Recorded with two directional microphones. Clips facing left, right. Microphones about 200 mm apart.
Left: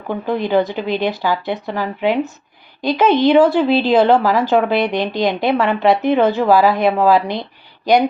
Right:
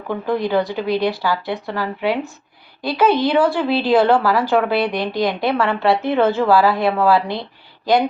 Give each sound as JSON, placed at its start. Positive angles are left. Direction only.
{"t": 0.3, "sound": "a woman's voice", "side_deg": 20}